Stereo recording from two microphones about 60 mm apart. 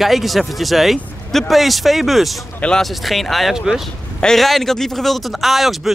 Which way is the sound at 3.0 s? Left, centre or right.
Centre.